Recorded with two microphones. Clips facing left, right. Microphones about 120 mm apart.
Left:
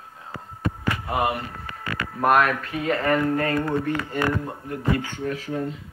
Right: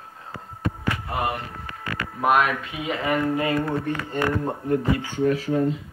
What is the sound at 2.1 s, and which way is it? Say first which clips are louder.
Speech: left 1 dB; 5° right (ahead or behind).